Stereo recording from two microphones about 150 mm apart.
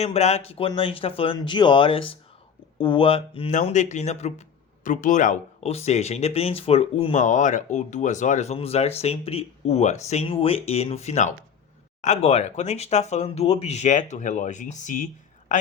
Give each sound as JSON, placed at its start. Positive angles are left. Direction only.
{"t": 0.0, "sound": "speech", "side_deg": 45}
{"t": 3.5, "sound": "speech", "side_deg": 55}